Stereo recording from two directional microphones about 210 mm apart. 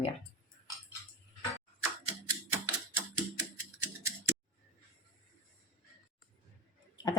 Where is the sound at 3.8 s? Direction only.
10° right (ahead or behind).